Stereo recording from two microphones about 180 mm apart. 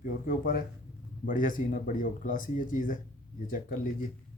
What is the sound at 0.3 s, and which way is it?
Speech, 50° left (ahead or behind).